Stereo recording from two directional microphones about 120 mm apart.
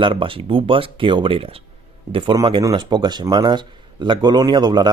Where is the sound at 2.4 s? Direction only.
35° right (ahead or behind).